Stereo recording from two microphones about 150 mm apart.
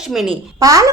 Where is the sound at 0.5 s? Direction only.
25° right (ahead or behind).